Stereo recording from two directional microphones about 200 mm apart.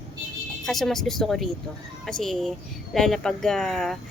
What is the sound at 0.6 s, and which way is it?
Speech, centre (ahead or behind).